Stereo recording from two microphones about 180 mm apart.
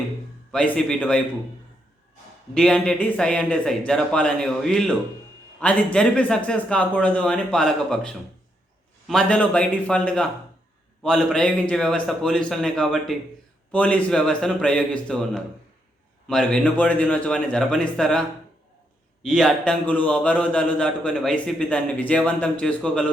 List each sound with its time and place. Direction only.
0.5 s a man's voice: 5° left (ahead or behind)
2.6 s a man's voice: 5° left (ahead or behind)